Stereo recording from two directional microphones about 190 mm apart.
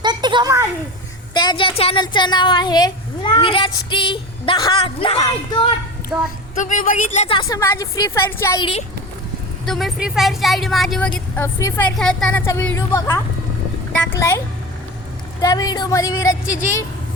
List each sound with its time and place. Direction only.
0.0 s a sound: 25° right (ahead or behind)
1.3 s a woman's voice: 25° left (ahead or behind)
6.1 s speech: centre (ahead or behind)
6.6 s speech: 40° left (ahead or behind)
7.4 s a woman's voice: 15° left (ahead or behind)
9.6 s a woman's voice: centre (ahead or behind); by 16.4 s 20° left (ahead or behind)